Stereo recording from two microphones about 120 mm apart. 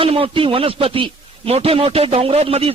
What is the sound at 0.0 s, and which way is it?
A man's voice, 50° right (ahead or behind).